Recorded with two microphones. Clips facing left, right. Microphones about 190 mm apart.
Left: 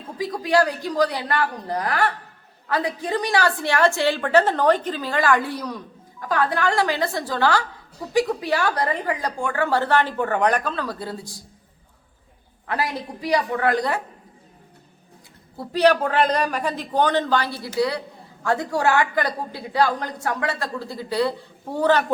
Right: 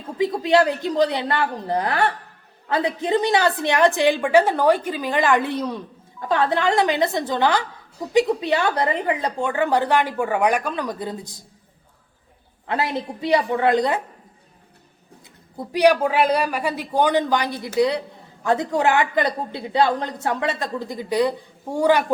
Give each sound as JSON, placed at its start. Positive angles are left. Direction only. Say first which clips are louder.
{"t": 0.2, "sound": "a woman's voice", "louder": "right 3 dB", "side_deg": -25}
{"t": 12.6, "sound": "a woman's voice", "louder": "right 2 dB", "side_deg": -25}
{"t": 15.5, "sound": "a woman's voice", "louder": "right 1 dB", "side_deg": -10}